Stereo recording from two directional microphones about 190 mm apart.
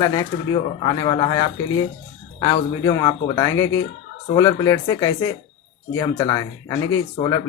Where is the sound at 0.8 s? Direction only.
25° left (ahead or behind).